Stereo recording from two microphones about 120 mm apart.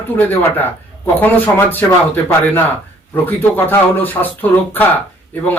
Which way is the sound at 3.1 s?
15° left (ahead or behind).